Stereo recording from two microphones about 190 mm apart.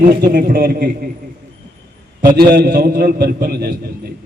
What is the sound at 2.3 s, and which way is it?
A man's voice, 55° right (ahead or behind).